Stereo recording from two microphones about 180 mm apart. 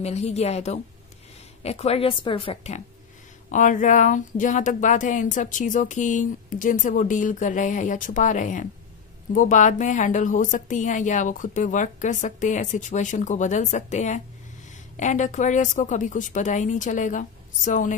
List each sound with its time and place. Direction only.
0.0 s a woman's voice: 35° left (ahead or behind)
3.5 s speech: 45° left (ahead or behind)